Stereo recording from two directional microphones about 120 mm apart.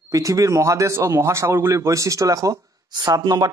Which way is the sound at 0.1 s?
30° right (ahead or behind).